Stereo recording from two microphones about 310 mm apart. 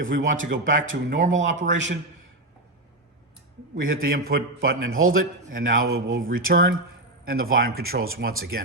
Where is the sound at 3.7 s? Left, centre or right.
Right.